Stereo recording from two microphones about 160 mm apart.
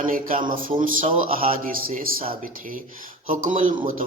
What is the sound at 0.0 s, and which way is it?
A man's voice, 55° right (ahead or behind).